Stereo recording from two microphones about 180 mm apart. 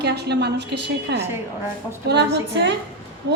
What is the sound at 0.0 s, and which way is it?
A woman's voice, 65° right (ahead or behind).